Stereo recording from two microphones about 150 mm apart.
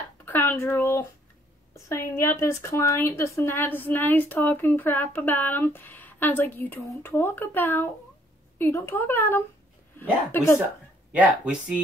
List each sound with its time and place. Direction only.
0.2 s a sound: 15° left (ahead or behind)
1.9 s a woman's voice: 15° left (ahead or behind)
11.1 s speech: 10° right (ahead or behind)